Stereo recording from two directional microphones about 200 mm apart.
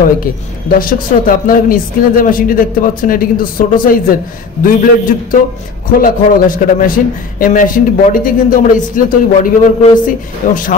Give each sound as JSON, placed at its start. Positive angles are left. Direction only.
{"t": 0.7, "sound": "speech", "side_deg": 45}